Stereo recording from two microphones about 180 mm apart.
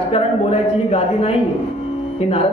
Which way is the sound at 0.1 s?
35° left (ahead or behind).